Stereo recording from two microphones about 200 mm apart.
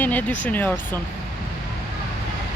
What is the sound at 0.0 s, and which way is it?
Speech, 10° left (ahead or behind).